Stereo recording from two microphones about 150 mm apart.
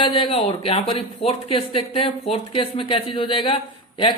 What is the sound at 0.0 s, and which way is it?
Speech, 35° left (ahead or behind).